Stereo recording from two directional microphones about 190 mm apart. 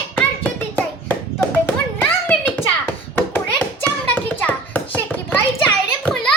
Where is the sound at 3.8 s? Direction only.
10° left (ahead or behind).